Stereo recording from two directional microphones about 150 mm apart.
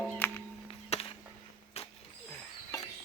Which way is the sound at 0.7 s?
40° left (ahead or behind).